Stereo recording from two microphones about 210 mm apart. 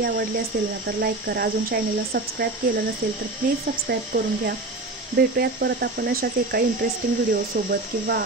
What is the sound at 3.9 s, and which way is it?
Speech, 45° right (ahead or behind).